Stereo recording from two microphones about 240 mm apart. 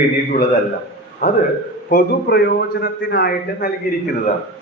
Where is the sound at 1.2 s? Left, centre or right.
Left.